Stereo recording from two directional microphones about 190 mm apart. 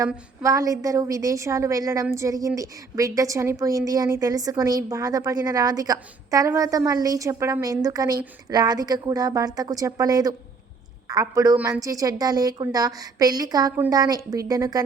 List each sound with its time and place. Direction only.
0.4 s a woman's voice: 20° right (ahead or behind)